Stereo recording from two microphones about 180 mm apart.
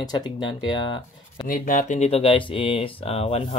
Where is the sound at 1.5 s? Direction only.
50° left (ahead or behind).